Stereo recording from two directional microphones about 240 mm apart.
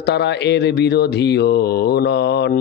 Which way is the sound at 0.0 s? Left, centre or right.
Left.